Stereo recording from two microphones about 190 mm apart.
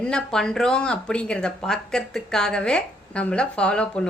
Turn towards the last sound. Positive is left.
turn(degrees=5)  # may be behind; listen again after turning